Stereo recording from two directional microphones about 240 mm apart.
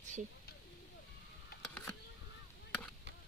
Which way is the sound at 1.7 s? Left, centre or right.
Centre.